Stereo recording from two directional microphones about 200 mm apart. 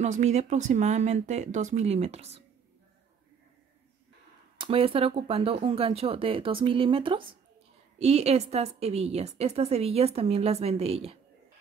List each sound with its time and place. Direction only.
0.0 s a woman's voice: 35° right (ahead or behind)
4.6 s a woman's voice: 25° right (ahead or behind)